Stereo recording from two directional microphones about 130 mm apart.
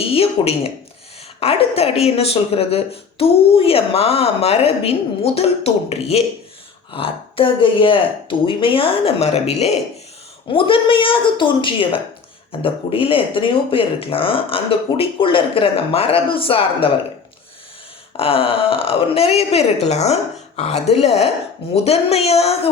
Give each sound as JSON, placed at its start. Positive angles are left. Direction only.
{"t": 0.0, "sound": "speech", "side_deg": 50}
{"t": 10.5, "sound": "speech", "side_deg": 45}
{"t": 18.2, "sound": "speech", "side_deg": 45}